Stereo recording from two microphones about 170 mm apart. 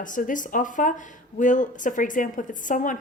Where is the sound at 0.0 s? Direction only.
50° left (ahead or behind).